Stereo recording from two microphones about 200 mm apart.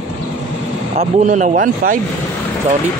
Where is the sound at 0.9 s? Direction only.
35° right (ahead or behind).